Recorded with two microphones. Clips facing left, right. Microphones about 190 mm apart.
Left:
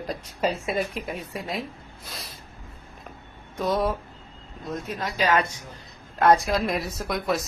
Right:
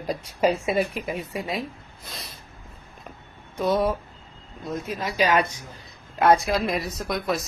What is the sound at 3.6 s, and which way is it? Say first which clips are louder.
A woman's voice: right 2 dB; centre (ahead or behind).